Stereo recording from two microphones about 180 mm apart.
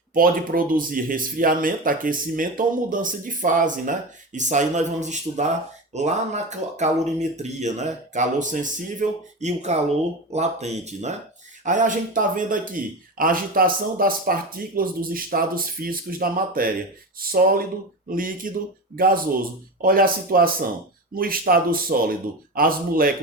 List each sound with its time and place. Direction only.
0.1 s speech: 50° right (ahead or behind)